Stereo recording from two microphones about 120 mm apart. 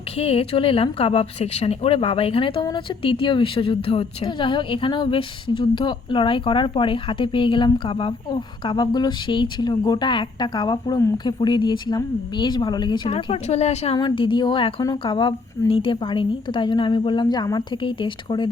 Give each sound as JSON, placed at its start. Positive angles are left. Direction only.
{"t": 0.2, "sound": "a woman's voice", "side_deg": 55}
{"t": 13.1, "sound": "speech", "side_deg": 50}
{"t": 13.9, "sound": "a woman's voice", "side_deg": 40}